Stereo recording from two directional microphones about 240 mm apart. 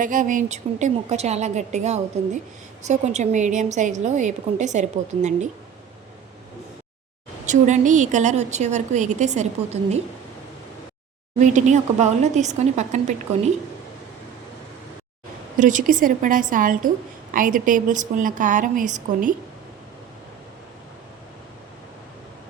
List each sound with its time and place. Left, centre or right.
0.0 s a woman's voice: right
7.4 s a woman's voice: right
11.3 s a woman's voice: right
15.5 s a woman's voice: right